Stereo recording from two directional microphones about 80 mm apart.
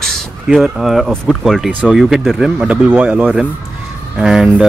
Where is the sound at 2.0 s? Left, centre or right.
Centre.